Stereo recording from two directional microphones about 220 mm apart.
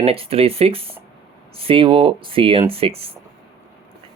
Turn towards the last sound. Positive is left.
turn(degrees=-25)  # may be behind; listen again after turning